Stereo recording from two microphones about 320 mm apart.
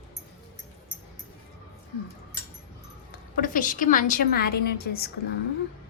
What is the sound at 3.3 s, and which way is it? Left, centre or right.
A woman's voice, left.